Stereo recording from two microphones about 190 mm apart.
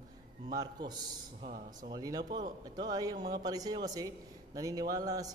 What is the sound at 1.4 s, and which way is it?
Speech, 45° right (ahead or behind).